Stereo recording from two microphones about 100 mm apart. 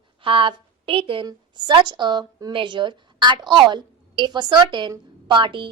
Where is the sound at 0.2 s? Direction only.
60° right (ahead or behind).